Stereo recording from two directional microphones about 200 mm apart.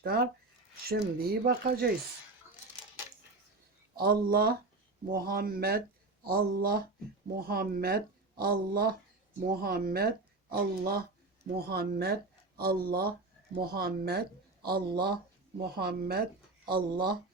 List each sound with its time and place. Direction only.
0.0 s speech: 50° right (ahead or behind)
4.0 s speech: 50° right (ahead or behind)